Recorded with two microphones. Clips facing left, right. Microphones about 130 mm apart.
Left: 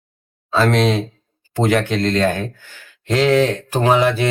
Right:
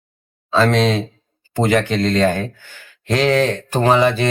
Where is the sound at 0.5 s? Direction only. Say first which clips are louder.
Right 1 dB; 5° left (ahead or behind).